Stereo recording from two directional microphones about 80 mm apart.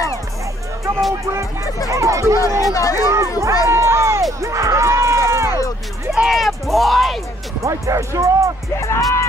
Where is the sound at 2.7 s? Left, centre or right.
Left.